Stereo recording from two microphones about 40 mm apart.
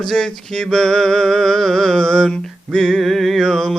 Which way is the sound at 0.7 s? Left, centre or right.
Centre.